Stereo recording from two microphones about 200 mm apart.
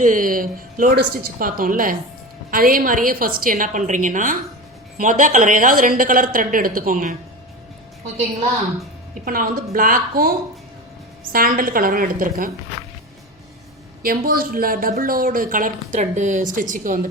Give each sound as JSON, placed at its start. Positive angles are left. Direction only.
{"t": 0.0, "sound": "a woman's voice", "side_deg": -40}
{"t": 9.2, "sound": "a woman's voice", "side_deg": -45}
{"t": 14.0, "sound": "a woman's voice", "side_deg": -45}